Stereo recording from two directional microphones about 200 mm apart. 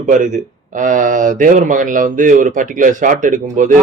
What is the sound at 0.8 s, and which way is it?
Speech, 40° right (ahead or behind).